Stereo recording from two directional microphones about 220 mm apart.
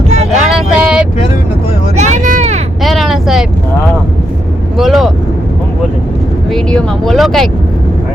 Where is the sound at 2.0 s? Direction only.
30° right (ahead or behind).